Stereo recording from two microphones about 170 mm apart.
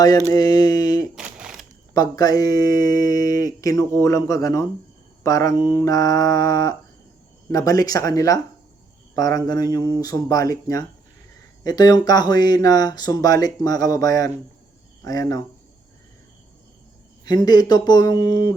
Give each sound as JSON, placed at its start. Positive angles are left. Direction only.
{"t": 0.3, "sound": "speech", "side_deg": 25}
{"t": 1.1, "sound": "a sound", "side_deg": -5}
{"t": 1.9, "sound": "speech", "side_deg": 20}
{"t": 17.2, "sound": "speech", "side_deg": 25}